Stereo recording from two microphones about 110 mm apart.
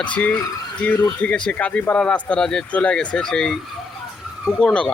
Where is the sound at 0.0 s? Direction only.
10° left (ahead or behind).